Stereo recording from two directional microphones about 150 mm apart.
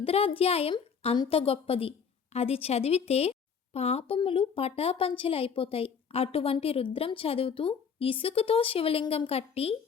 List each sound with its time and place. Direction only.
0.0 s a woman's voice: 40° left (ahead or behind)